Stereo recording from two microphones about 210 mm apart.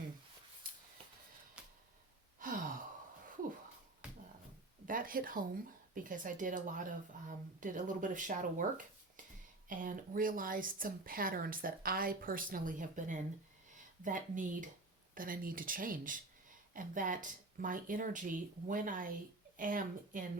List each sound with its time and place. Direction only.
1.6 s a sound: 5° right (ahead or behind)
2.4 s gasp: 40° right (ahead or behind)
4.9 s speech: 40° right (ahead or behind)
9.6 s speech: 40° right (ahead or behind)